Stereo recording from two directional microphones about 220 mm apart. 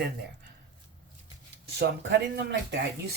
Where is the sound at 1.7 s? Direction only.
50° right (ahead or behind).